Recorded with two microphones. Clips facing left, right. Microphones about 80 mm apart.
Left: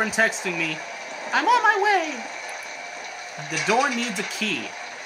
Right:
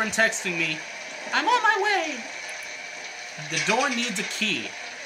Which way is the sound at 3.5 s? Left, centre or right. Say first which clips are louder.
Left 3 dB; centre.